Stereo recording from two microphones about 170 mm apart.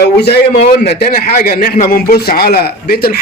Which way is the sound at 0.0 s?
75° left (ahead or behind).